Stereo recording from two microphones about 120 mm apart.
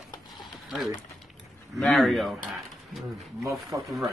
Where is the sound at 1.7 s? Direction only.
Centre (ahead or behind).